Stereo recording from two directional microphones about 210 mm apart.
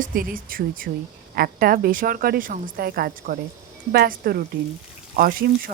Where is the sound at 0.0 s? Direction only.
40° right (ahead or behind).